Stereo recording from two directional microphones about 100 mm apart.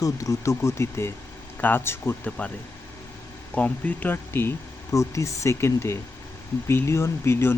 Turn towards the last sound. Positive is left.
turn(degrees=25)  # may be behind; listen again after turning